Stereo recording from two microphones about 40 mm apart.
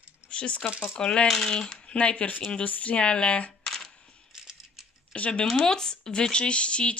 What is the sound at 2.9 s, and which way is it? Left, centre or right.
Speech, left.